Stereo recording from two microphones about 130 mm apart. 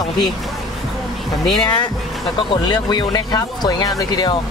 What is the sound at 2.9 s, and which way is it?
Speech, 30° left (ahead or behind).